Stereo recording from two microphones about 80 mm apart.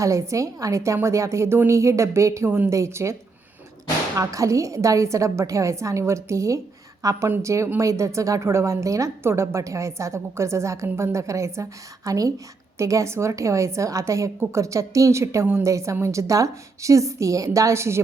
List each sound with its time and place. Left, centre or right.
0.0 s a woman's voice: right
4.2 s a woman's voice: right